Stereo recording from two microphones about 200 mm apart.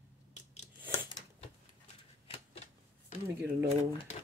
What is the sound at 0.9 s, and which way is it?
Scissors, 20° left (ahead or behind).